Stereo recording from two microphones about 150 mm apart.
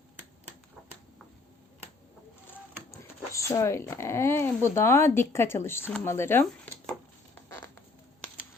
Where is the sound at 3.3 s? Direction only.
20° left (ahead or behind).